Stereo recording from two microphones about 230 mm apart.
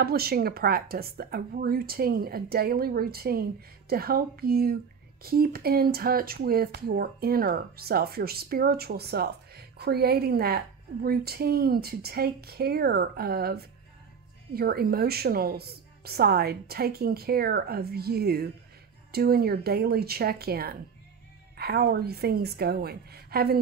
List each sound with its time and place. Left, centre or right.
0.0 s a woman's voice: right